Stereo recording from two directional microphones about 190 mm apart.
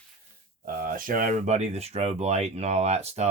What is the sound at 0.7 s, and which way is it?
Speech, 50° right (ahead or behind).